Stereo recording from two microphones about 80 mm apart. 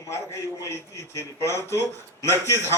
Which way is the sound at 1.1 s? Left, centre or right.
Left.